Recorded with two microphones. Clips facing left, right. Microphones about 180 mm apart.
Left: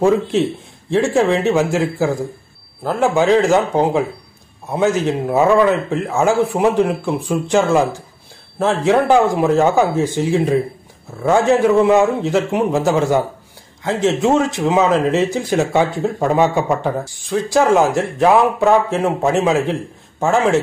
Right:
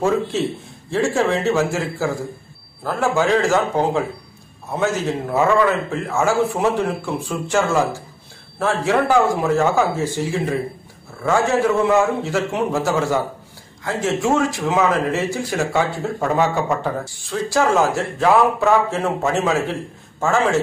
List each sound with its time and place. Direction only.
0.8 s speech: 15° left (ahead or behind)